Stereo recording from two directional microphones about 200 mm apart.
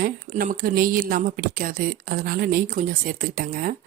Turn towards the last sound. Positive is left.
turn(degrees=-45)  # may be behind; listen again after turning